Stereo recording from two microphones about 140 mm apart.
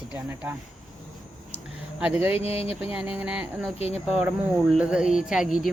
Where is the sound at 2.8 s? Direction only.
5° right (ahead or behind).